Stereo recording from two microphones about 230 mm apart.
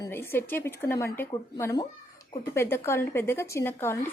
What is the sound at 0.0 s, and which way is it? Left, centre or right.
A woman's voice, centre.